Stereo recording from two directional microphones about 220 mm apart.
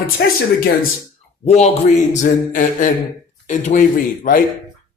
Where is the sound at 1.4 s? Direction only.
30° left (ahead or behind).